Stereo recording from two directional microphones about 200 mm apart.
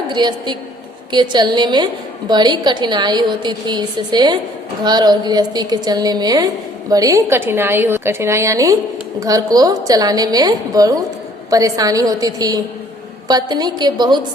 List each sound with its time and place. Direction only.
0.1 s a woman's voice: 20° right (ahead or behind)